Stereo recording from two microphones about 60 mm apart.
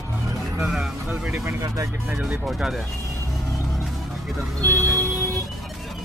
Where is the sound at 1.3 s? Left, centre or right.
Right.